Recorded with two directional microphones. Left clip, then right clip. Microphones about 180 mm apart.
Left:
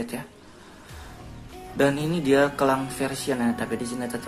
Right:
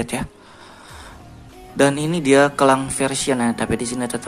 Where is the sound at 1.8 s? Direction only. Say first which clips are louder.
Right 5 dB; 20° right (ahead or behind).